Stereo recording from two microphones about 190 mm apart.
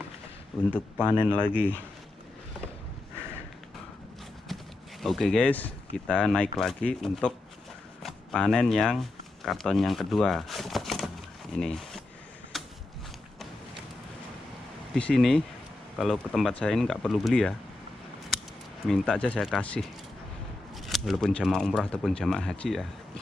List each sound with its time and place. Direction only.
0.7 s speech: 5° left (ahead or behind)
1.5 s speech: 10° right (ahead or behind)
5.0 s speech: centre (ahead or behind)
12.5 s a sound: centre (ahead or behind)
15.0 s speech: 5° left (ahead or behind)
18.9 s speech: 5° left (ahead or behind)